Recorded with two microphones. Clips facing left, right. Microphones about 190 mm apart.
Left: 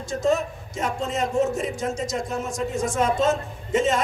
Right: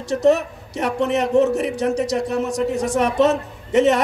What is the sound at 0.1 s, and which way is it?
Speech, 70° right (ahead or behind).